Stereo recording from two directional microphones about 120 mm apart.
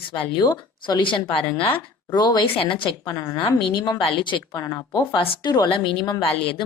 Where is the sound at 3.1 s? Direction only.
30° left (ahead or behind).